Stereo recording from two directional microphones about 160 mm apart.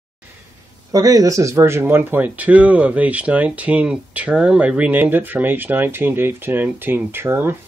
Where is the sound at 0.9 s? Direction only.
20° right (ahead or behind).